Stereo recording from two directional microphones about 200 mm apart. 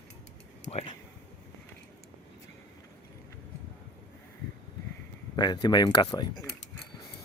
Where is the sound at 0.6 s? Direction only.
30° left (ahead or behind).